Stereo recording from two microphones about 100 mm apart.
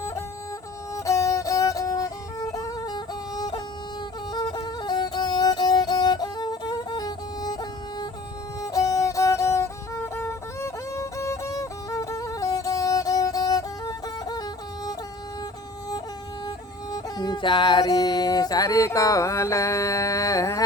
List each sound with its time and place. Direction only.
0.9 s music: 30° left (ahead or behind)
8.6 s music: 35° left (ahead or behind)
16.9 s music: 45° left (ahead or behind)
18.9 s a sound: 35° left (ahead or behind)